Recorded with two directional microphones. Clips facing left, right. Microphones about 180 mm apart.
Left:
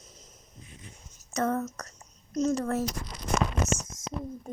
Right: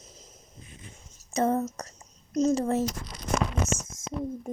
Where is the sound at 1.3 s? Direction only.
30° right (ahead or behind).